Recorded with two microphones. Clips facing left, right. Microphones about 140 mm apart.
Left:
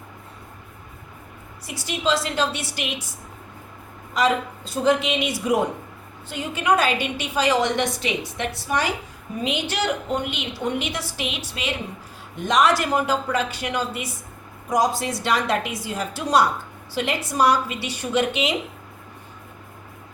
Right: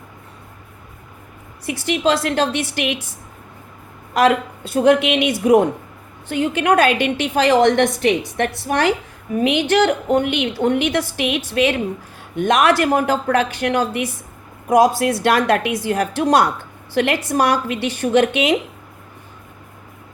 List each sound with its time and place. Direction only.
1.6 s a woman's voice: 60° right (ahead or behind)
4.1 s a woman's voice: 60° right (ahead or behind)